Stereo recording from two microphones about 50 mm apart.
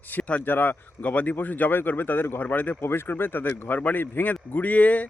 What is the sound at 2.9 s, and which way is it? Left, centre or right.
Speech, left.